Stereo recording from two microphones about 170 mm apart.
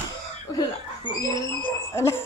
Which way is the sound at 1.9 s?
15° left (ahead or behind).